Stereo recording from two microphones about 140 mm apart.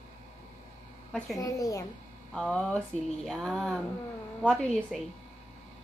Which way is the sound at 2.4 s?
5° left (ahead or behind).